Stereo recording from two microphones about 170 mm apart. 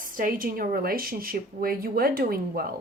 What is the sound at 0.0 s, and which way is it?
Speech, 55° right (ahead or behind).